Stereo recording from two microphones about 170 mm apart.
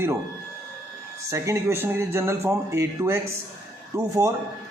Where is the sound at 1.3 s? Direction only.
15° right (ahead or behind).